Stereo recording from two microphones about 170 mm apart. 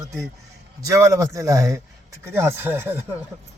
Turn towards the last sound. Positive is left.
turn(degrees=-10)  # may be behind; listen again after turning